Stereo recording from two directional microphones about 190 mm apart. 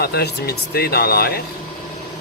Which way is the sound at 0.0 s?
55° left (ahead or behind).